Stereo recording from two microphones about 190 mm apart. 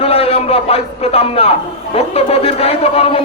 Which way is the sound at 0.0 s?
30° left (ahead or behind).